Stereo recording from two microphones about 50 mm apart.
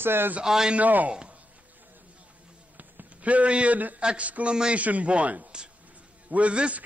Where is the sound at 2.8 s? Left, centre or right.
Right.